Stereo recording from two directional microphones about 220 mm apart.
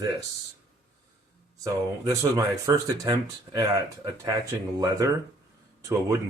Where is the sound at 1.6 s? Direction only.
15° right (ahead or behind).